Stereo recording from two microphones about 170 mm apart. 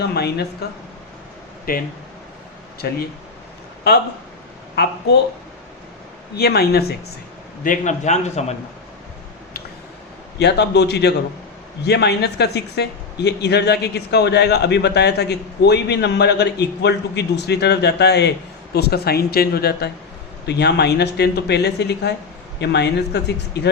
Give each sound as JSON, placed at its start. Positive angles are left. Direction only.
{"t": 0.1, "sound": "speech", "side_deg": 70}
{"t": 1.7, "sound": "speech", "side_deg": 60}
{"t": 2.8, "sound": "speech", "side_deg": 65}
{"t": 4.7, "sound": "speech", "side_deg": 75}
{"t": 6.3, "sound": "speech", "side_deg": 70}
{"t": 7.6, "sound": "a man's voice", "side_deg": 50}
{"t": 10.3, "sound": "speech", "side_deg": 80}
{"t": 20.5, "sound": "speech", "side_deg": 80}